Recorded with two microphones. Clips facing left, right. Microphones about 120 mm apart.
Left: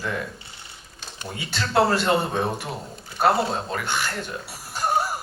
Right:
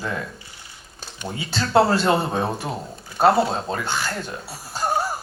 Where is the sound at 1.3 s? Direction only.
25° right (ahead or behind).